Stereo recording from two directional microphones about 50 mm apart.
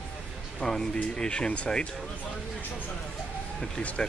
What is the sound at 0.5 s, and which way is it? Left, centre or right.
Speech, centre.